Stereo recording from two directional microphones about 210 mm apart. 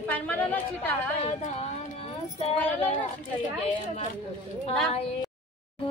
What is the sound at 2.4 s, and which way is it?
Speech, 30° left (ahead or behind).